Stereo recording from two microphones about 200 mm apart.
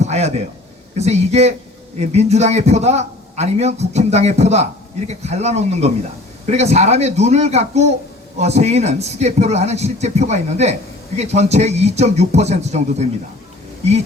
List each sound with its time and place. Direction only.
0.0 s a man's voice: 35° right (ahead or behind)